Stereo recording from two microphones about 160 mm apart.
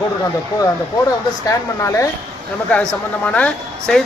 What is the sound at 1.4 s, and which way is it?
Speech, 20° left (ahead or behind).